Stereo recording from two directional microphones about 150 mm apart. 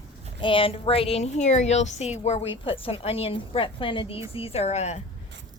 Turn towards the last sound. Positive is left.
turn(degrees=45)  # may be behind; listen again after turning